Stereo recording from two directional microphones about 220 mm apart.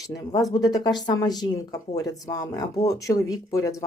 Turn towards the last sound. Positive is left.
turn(degrees=15)  # may be behind; listen again after turning